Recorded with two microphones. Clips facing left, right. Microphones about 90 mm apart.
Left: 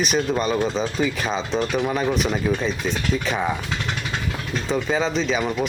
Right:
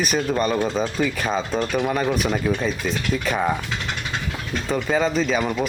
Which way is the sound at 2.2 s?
5° right (ahead or behind).